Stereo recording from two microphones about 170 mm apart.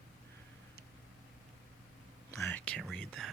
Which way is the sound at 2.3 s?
15° left (ahead or behind).